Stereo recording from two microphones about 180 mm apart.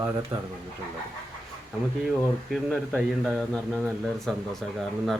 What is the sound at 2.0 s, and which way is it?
Speech, centre (ahead or behind).